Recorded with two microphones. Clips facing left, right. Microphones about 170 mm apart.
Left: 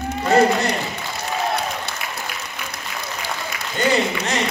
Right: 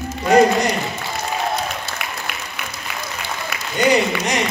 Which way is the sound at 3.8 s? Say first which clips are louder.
Right 3 dB; 15° right (ahead or behind).